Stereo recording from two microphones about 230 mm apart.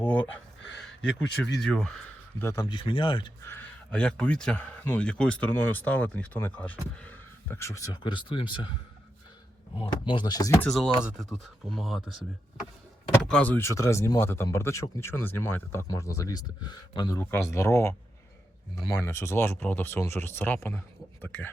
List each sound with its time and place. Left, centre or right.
1.2 s speech: left
1.6 s speech: centre
2.4 s speech: centre
3.4 s speech: centre
9.7 s speech: left; by 12.0 s centre
13.1 s speech: centre
19.0 s speech: centre